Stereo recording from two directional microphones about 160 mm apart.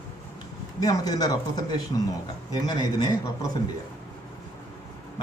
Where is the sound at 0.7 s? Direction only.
25° left (ahead or behind).